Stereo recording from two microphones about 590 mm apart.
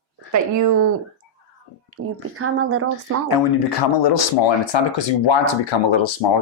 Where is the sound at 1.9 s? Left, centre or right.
Right.